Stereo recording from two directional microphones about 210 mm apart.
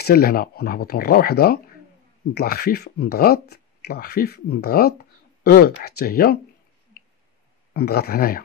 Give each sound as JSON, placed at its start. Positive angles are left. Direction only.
{"t": 0.0, "sound": "speech", "side_deg": 45}
{"t": 7.7, "sound": "speech", "side_deg": 45}